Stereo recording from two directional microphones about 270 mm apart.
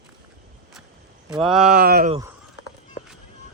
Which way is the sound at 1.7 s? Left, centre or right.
Right.